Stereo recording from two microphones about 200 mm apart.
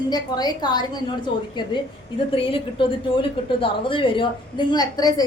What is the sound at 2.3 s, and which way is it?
A woman's voice, 25° left (ahead or behind).